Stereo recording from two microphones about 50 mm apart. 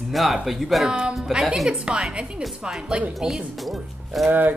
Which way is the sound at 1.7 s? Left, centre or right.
Centre.